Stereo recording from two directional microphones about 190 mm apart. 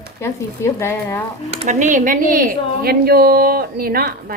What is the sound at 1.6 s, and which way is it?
A woman's voice, 40° right (ahead or behind).